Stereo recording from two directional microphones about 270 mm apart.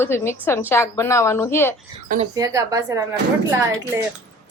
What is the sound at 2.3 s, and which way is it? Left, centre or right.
Speech, centre.